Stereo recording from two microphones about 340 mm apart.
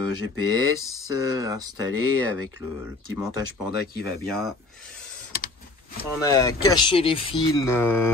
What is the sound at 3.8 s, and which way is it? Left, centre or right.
Speech, left.